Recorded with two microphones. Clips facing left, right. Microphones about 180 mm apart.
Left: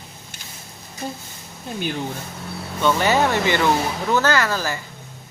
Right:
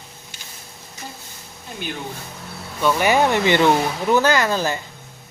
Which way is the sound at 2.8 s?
15° right (ahead or behind).